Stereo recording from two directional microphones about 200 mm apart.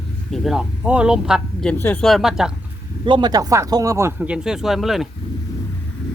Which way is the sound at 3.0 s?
20° right (ahead or behind).